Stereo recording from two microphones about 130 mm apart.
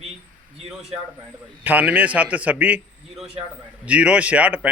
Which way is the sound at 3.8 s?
10° right (ahead or behind).